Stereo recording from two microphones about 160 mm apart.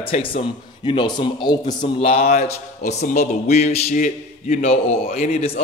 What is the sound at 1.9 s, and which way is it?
Speech, 40° left (ahead or behind).